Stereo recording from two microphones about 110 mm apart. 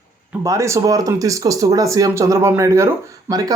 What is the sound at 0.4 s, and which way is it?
Speech, 25° right (ahead or behind).